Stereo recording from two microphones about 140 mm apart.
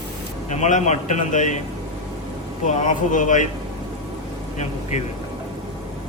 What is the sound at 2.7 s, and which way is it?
Speech, 60° left (ahead or behind).